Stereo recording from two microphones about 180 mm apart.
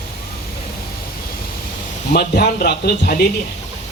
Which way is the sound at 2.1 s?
65° left (ahead or behind).